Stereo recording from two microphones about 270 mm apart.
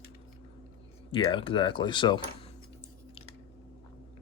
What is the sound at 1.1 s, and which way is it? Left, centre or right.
Speech, centre.